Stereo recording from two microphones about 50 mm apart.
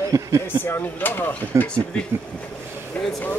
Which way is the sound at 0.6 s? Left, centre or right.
Left.